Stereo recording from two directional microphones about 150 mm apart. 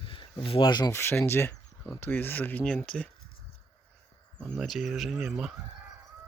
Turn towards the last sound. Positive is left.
turn(degrees=0)  # may be behind; listen again after turning